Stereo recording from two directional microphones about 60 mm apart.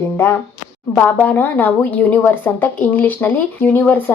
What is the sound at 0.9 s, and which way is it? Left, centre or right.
A woman's voice, left.